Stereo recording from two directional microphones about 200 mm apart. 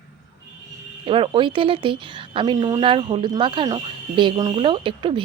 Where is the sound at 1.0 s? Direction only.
25° right (ahead or behind).